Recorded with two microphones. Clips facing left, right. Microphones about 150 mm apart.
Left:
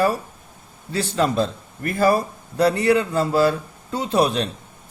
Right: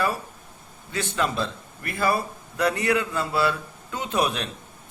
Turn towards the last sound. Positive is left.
turn(degrees=35)  # may be behind; listen again after turning